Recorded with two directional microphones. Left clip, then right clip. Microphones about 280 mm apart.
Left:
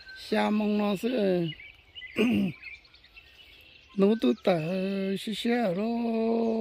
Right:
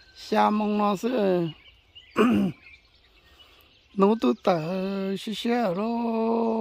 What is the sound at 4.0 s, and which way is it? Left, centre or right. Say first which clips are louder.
Speech: right 3 dB; centre.